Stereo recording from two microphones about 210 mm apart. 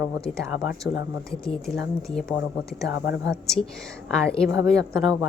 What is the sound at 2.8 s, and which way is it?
Speech, 50° left (ahead or behind).